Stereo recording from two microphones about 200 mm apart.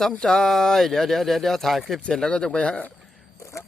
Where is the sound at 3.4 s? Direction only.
15° left (ahead or behind).